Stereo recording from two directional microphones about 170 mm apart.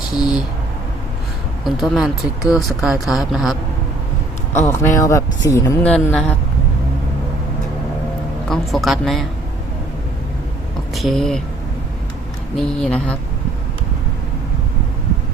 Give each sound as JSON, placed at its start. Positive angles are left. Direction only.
{"t": 0.1, "sound": "speech", "side_deg": 0}
{"t": 1.6, "sound": "speech", "side_deg": 0}
{"t": 4.5, "sound": "speech", "side_deg": 10}
{"t": 8.4, "sound": "speech", "side_deg": 0}
{"t": 10.9, "sound": "speech", "side_deg": 0}
{"t": 12.5, "sound": "speech", "side_deg": 5}